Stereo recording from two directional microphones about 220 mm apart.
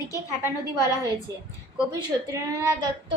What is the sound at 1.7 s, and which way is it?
Speech, 15° right (ahead or behind).